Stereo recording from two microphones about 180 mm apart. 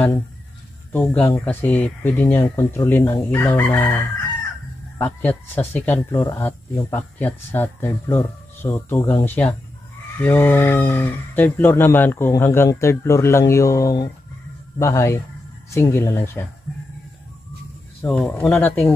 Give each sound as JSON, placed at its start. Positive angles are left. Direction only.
{"t": 0.9, "sound": "speech", "side_deg": 5}
{"t": 18.0, "sound": "speech", "side_deg": 5}